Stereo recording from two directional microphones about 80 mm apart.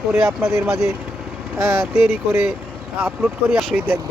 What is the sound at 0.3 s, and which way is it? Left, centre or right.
Speech, right.